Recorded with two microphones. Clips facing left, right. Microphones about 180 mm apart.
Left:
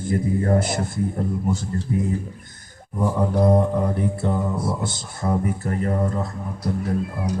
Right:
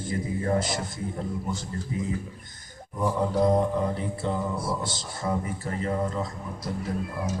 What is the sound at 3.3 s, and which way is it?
A man's voice, 55° left (ahead or behind).